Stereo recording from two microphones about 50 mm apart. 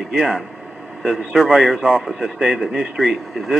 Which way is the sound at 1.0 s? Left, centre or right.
Centre.